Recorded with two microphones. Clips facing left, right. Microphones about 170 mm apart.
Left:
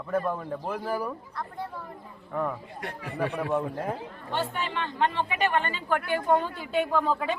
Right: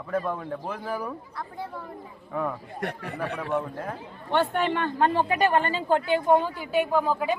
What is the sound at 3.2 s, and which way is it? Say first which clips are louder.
Speech: left 2 dB; 15° left (ahead or behind).